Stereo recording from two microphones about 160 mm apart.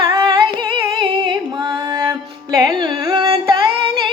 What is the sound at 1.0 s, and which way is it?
Music, 30° right (ahead or behind).